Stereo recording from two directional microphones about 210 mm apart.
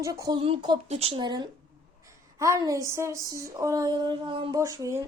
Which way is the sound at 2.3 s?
15° right (ahead or behind).